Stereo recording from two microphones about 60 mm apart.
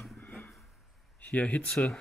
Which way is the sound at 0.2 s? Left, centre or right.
Left.